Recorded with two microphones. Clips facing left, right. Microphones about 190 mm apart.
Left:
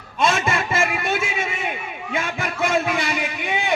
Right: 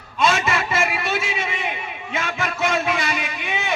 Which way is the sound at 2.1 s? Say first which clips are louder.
Even; 55° left (ahead or behind).